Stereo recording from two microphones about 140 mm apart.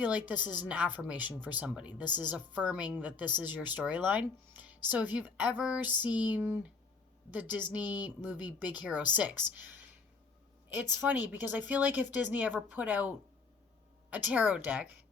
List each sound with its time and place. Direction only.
0.0 s speech: 10° right (ahead or behind)
11.3 s speech: 10° right (ahead or behind)